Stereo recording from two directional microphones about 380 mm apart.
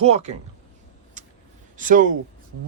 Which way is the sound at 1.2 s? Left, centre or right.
Centre.